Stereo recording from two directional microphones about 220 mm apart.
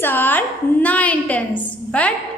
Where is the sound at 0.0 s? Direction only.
10° left (ahead or behind).